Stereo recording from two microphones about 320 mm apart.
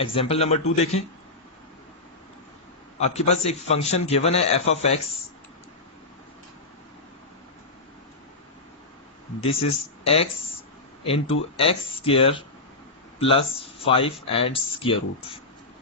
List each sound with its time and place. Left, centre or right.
0.0 s a man's voice: centre
3.0 s a man's voice: centre
9.4 s speech: centre